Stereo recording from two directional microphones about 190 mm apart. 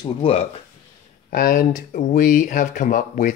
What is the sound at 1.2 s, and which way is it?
Speech, 45° left (ahead or behind).